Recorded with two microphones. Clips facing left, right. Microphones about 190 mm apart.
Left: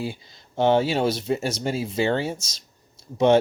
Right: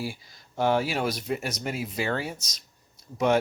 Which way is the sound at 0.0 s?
25° left (ahead or behind).